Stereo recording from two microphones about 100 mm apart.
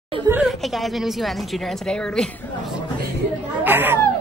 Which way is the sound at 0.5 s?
Centre (ahead or behind).